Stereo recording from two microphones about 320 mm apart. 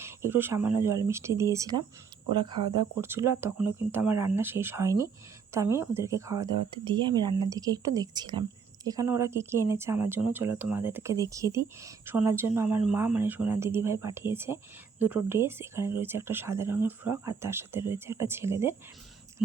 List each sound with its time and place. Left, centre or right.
0.0 s speech: centre